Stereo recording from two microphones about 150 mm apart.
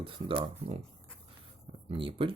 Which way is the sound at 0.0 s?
35° right (ahead or behind).